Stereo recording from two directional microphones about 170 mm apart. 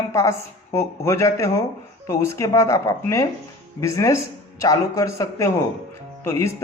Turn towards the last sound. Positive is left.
turn(degrees=15)  # may be behind; listen again after turning